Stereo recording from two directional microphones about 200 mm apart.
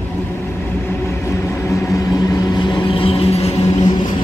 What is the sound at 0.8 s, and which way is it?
Vehicle, 10° left (ahead or behind).